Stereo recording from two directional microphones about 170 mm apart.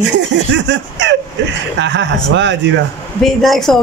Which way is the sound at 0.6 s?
90° right.